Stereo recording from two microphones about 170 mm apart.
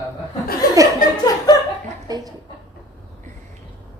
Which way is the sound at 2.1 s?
20° right (ahead or behind).